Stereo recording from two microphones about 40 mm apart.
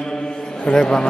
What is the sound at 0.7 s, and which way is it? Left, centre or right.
Speech, centre.